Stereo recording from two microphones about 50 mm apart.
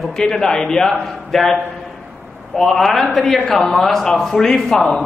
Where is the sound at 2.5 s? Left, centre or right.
Centre.